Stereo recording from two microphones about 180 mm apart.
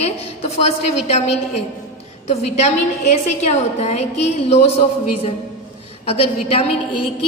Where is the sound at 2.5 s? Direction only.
40° left (ahead or behind).